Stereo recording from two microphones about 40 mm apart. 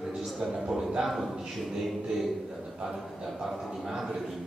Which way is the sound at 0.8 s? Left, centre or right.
Centre.